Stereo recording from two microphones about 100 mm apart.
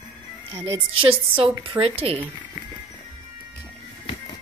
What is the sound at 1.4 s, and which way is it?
Speech, 60° right (ahead or behind).